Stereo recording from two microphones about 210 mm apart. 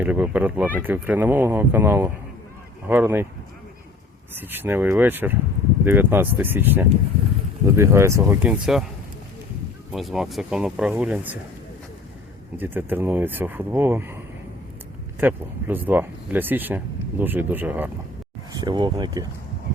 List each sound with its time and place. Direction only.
0.0 s speech: 5° right (ahead or behind)
4.4 s speech: 10° right (ahead or behind)
9.9 s speech: centre (ahead or behind)
12.5 s speech: 10° right (ahead or behind)
15.2 s speech: 10° right (ahead or behind)
18.6 s speech: 20° right (ahead or behind)